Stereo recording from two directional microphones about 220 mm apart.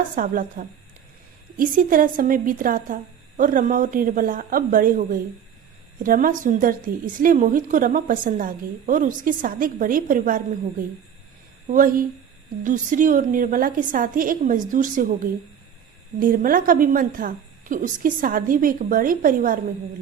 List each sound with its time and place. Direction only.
0.2 s a woman's voice: 40° right (ahead or behind)